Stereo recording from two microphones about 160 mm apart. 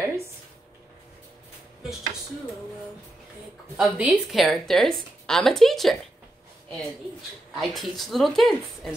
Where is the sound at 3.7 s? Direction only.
5° right (ahead or behind).